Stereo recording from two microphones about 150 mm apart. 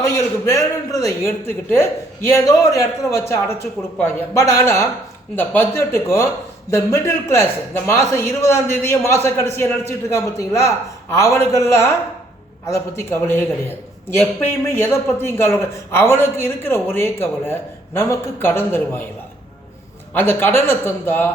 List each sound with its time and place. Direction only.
0.0 s a man's voice: 20° left (ahead or behind)
20.1 s a man's voice: 15° left (ahead or behind)